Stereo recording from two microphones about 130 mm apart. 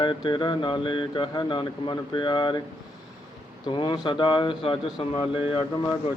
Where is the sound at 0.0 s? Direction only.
40° left (ahead or behind).